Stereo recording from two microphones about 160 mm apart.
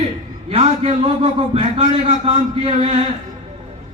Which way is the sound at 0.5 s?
35° right (ahead or behind).